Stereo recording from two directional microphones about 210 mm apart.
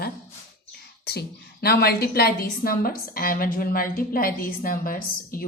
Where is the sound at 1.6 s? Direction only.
50° left (ahead or behind).